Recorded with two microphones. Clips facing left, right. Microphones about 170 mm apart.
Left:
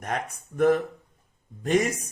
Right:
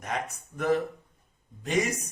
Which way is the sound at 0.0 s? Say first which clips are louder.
Left 2 dB; 50° left (ahead or behind).